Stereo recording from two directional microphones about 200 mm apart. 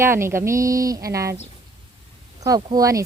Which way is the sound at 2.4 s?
20° right (ahead or behind).